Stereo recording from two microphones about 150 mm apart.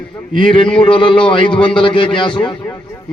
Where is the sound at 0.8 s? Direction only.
35° left (ahead or behind).